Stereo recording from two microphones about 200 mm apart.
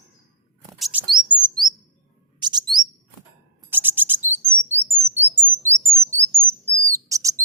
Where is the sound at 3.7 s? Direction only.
10° right (ahead or behind).